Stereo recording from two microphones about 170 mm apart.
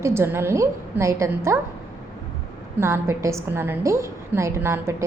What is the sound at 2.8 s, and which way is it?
A woman's voice, 15° right (ahead or behind).